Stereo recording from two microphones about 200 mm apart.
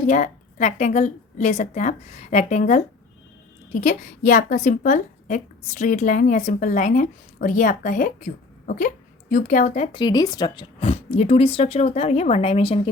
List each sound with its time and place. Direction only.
0.0 s a woman's voice: 35° left (ahead or behind)